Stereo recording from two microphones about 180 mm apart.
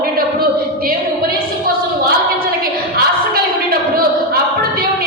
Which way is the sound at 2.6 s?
55° right (ahead or behind).